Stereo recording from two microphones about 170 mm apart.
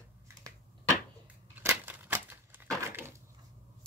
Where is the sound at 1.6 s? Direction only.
10° right (ahead or behind).